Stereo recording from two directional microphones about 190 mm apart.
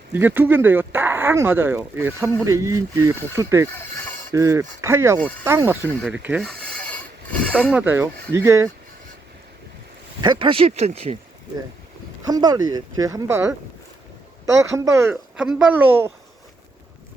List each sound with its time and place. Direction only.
0.1 s speech: 10° right (ahead or behind)
6.1 s a sound: 10° right (ahead or behind)
7.7 s speech: 10° right (ahead or behind)
10.2 s speech: 25° right (ahead or behind)
12.2 s speech: 20° right (ahead or behind)
15.1 s speech: 5° right (ahead or behind)